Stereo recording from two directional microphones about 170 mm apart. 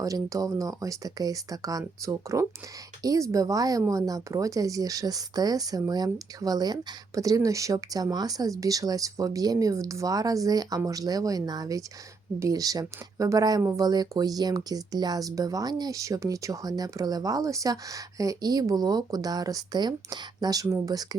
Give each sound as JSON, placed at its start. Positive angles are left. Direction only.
{"t": 0.0, "sound": "speech", "side_deg": -20}